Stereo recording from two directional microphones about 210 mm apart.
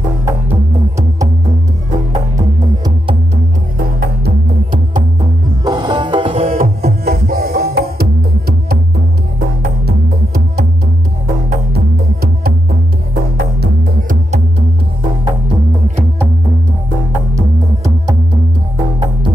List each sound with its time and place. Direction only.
0.2 s music: 15° right (ahead or behind)
3.7 s music: 40° right (ahead or behind)
5.6 s music: 20° right (ahead or behind)
6.4 s music: 40° right (ahead or behind)
9.8 s music: 50° right (ahead or behind)
11.7 s music: 45° right (ahead or behind)